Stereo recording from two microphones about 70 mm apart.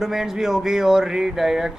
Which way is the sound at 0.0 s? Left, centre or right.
Centre.